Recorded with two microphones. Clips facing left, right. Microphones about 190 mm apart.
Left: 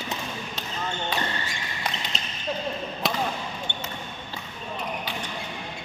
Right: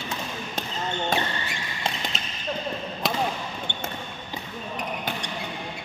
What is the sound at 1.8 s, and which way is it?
Basketball bounce, 25° right (ahead or behind).